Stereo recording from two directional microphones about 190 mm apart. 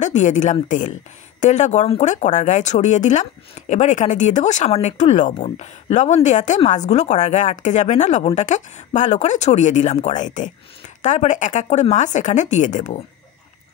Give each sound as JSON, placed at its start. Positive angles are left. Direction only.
{"t": 0.0, "sound": "speech", "side_deg": 40}